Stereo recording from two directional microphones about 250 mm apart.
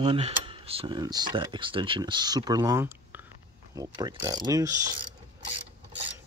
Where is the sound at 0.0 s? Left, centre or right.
Right.